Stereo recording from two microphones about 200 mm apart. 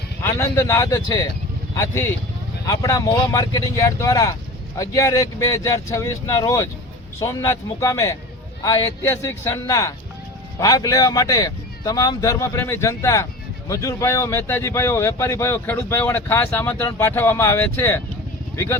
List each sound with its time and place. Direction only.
0.2 s speech: 15° left (ahead or behind)